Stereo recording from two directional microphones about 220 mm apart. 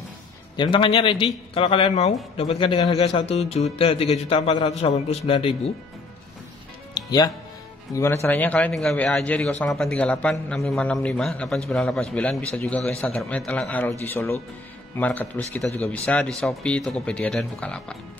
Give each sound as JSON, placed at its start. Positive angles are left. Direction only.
{"t": 0.6, "sound": "a man's voice", "side_deg": 20}
{"t": 6.9, "sound": "music", "side_deg": 20}
{"t": 7.9, "sound": "a man's voice", "side_deg": 10}